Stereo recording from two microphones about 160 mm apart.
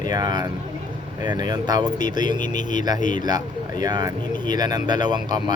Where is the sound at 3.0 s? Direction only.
55° left (ahead or behind).